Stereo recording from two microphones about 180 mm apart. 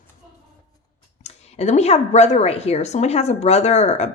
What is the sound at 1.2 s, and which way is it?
A woman's voice, 40° left (ahead or behind).